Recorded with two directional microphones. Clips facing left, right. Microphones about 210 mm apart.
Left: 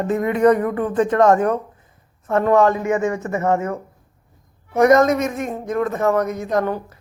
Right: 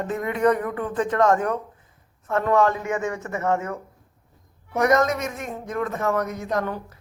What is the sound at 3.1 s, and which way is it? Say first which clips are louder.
Speech: left 5 dB; 30° left (ahead or behind).